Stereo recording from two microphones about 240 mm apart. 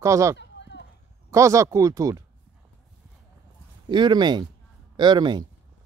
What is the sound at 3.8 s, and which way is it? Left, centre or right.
Speech, centre.